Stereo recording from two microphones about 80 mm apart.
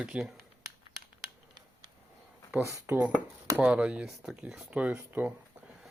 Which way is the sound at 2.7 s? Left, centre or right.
Right.